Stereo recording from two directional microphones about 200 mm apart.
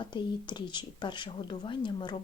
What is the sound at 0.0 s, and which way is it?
Speech, 25° left (ahead or behind).